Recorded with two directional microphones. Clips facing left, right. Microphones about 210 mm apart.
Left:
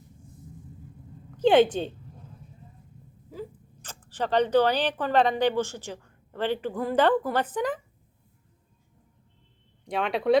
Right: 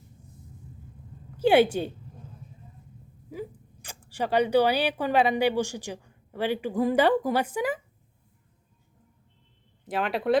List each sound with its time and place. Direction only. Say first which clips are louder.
1.4 s a woman's voice: left 1 dB; 10° right (ahead or behind)
3.2 s speech: right 2 dB; 10° right (ahead or behind)
9.8 s speech: left 1 dB; 5° right (ahead or behind)